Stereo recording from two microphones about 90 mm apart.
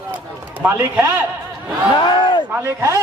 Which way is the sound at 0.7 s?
25° right (ahead or behind).